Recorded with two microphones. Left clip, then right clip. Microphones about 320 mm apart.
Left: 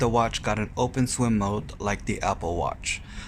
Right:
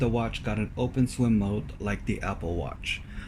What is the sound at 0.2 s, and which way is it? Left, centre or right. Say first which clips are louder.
Speech: left 7 dB; centre.